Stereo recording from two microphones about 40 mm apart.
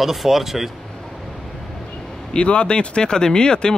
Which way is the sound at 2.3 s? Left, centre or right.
Left.